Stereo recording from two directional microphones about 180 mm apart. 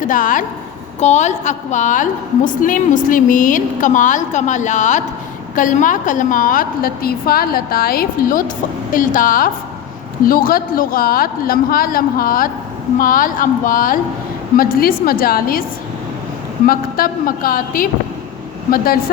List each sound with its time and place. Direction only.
0.1 s a woman's voice: 50° left (ahead or behind)
16.6 s a woman's voice: 55° left (ahead or behind)